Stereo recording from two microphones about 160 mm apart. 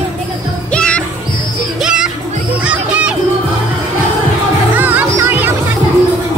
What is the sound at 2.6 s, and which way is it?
Crowd, 5° right (ahead or behind).